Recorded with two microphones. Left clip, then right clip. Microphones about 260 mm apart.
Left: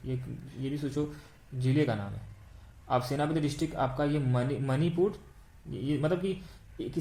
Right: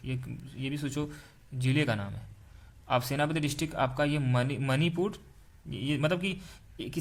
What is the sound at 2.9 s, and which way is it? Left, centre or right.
Speech, right.